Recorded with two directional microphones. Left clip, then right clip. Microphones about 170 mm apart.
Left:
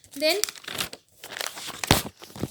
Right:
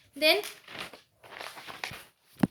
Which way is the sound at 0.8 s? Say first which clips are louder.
Left 9 dB; 70° left (ahead or behind).